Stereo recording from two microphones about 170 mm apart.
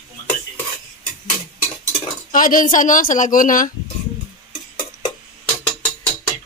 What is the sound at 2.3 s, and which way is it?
Speech, 55° left (ahead or behind).